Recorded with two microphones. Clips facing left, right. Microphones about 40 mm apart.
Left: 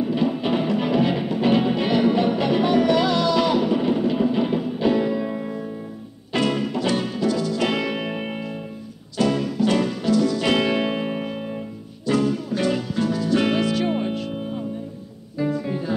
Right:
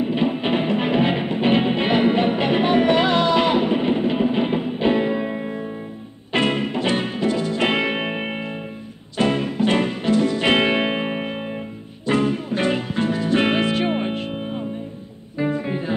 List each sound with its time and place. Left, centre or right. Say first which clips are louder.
0.0 s music: right 1 dB; right